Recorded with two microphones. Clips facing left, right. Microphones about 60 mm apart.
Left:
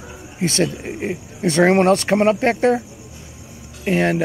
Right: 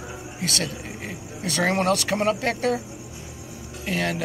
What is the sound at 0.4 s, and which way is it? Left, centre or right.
Speech, left.